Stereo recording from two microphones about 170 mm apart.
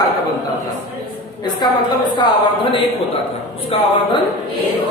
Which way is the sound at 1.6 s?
25° left (ahead or behind).